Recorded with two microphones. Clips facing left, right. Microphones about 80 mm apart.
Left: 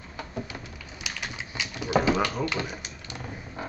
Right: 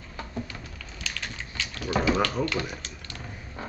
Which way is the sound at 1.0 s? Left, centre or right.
Centre.